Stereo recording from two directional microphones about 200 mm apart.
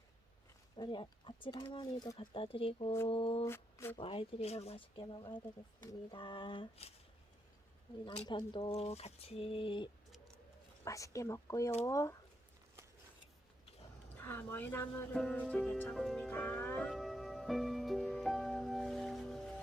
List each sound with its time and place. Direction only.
0.8 s speech: 25° left (ahead or behind)
3.4 s speech: 15° left (ahead or behind)
3.9 s speech: 30° left (ahead or behind)
8.0 s speech: 25° left (ahead or behind)
14.3 s music: 10° left (ahead or behind)